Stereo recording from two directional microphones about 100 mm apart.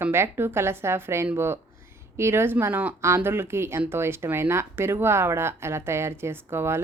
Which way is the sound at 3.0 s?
25° right (ahead or behind).